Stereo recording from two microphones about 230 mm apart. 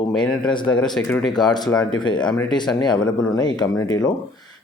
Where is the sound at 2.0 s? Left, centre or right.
Centre.